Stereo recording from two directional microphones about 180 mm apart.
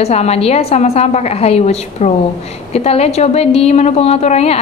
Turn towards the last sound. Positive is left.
turn(degrees=35)  # may be behind; listen again after turning